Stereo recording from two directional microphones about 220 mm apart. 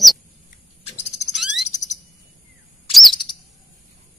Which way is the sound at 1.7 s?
35° left (ahead or behind).